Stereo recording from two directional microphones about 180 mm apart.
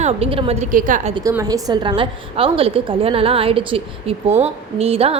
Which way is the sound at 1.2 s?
20° right (ahead or behind).